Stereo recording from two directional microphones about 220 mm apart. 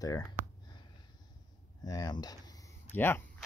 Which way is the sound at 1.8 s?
15° left (ahead or behind).